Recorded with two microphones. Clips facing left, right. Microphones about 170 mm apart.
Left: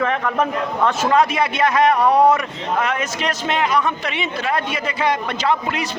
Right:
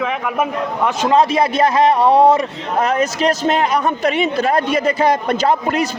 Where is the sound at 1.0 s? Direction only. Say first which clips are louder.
Right 5 dB; 30° right (ahead or behind).